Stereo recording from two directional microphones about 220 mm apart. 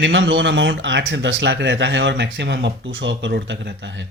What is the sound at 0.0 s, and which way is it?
Speech, 55° right (ahead or behind).